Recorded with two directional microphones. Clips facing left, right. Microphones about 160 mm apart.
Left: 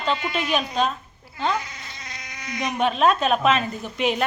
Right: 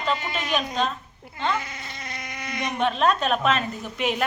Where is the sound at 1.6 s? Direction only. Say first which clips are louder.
Right 1 dB; 55° right (ahead or behind).